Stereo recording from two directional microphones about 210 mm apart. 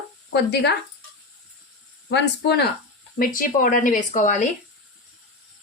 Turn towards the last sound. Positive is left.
turn(degrees=35)  # may be behind; listen again after turning